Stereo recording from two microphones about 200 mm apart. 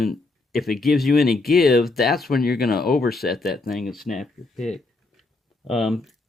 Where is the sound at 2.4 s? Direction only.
50° left (ahead or behind).